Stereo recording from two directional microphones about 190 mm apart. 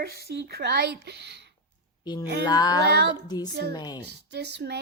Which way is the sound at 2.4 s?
20° left (ahead or behind).